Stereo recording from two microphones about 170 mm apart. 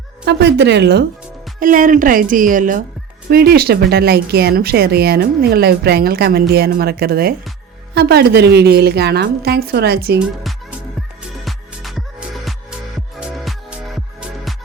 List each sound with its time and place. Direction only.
0.3 s a woman's voice: 80° right
1.5 s speech: 50° right (ahead or behind)
3.2 s speech: 70° right (ahead or behind)
10.2 s music: 5° right (ahead or behind)